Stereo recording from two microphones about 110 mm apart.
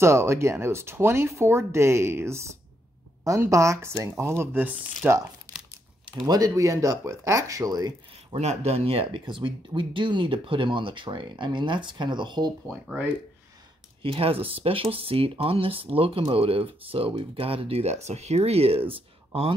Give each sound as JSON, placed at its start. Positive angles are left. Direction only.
{"t": 0.0, "sound": "speech", "side_deg": -25}
{"t": 6.2, "sound": "speech", "side_deg": -35}
{"t": 8.3, "sound": "speech", "side_deg": -75}
{"t": 12.8, "sound": "speech", "side_deg": -10}
{"t": 14.0, "sound": "speech", "side_deg": -60}